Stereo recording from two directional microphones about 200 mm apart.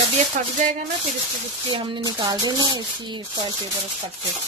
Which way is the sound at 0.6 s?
40° right (ahead or behind).